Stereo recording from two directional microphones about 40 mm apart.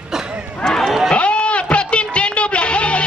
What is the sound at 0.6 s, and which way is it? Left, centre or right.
Livestock, centre.